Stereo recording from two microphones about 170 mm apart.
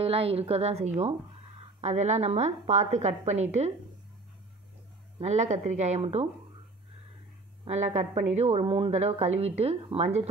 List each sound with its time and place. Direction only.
0.0 s a woman's voice: 35° right (ahead or behind)
5.2 s a woman's voice: 40° right (ahead or behind)
7.6 s a woman's voice: 40° right (ahead or behind)